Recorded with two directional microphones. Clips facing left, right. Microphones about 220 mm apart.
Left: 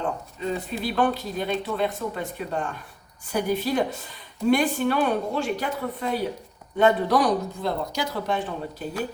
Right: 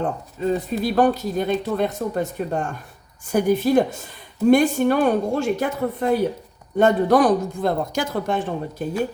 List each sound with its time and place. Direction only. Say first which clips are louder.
0.0 s speech: right 5 dB; 45° right (ahead or behind)